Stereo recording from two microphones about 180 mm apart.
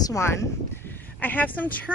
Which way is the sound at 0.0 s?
15° left (ahead or behind).